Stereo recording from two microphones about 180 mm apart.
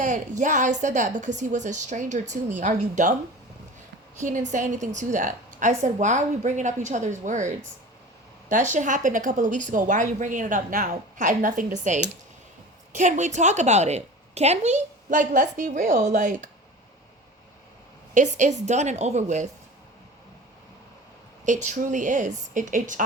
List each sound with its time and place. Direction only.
0.0 s a woman's voice: 45° right (ahead or behind)
4.2 s a woman's voice: 45° right (ahead or behind)
18.1 s a woman's voice: 40° right (ahead or behind)
21.4 s a woman's voice: 45° right (ahead or behind)